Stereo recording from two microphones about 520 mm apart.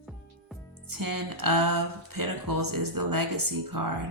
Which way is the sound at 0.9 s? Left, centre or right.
Right.